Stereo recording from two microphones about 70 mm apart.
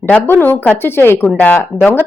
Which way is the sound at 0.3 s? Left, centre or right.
Left.